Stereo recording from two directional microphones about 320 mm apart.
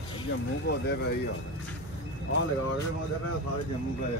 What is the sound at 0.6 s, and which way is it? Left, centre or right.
Speech, left.